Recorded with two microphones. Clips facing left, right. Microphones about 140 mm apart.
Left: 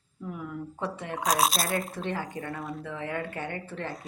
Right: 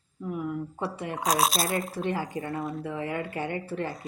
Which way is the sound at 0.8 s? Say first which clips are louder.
Even; 5° right (ahead or behind).